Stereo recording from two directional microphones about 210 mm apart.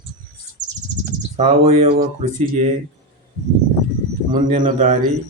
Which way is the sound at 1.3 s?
30° right (ahead or behind).